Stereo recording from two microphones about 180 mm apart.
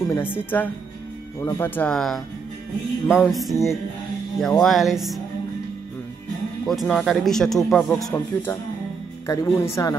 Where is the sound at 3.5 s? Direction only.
15° left (ahead or behind).